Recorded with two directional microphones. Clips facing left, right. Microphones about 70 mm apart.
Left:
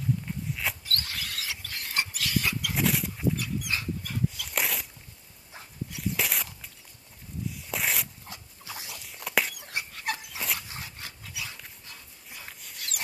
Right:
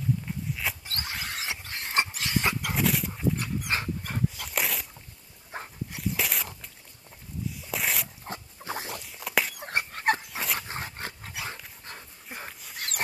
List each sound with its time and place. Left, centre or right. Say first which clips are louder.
0.5 s a sound: even; centre
0.8 s dog: even; right
2.7 s dog: right 1 dB; centre
3.3 s dog: right 2 dB; right
4.5 s a sound: even; centre
5.5 s dog: right 9 dB; right
5.9 s dog: even; centre
7.4 s zipper: even; centre
8.3 s dog: right 7 dB; right
9.0 s dog: left 1 dB; centre
9.6 s dog: right 5 dB; right